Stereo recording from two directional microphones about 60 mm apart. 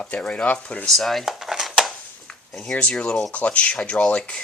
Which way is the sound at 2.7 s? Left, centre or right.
Centre.